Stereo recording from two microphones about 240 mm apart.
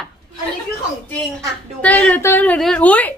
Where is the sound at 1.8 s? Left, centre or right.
Centre.